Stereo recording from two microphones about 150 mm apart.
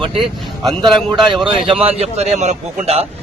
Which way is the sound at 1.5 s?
40° right (ahead or behind).